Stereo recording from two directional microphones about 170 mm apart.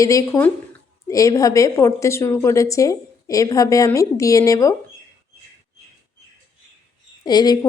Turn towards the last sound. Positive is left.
turn(degrees=25)  # may be behind; listen again after turning